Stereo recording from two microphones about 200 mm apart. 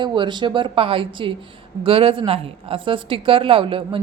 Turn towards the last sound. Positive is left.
turn(degrees=-25)  # may be behind; listen again after turning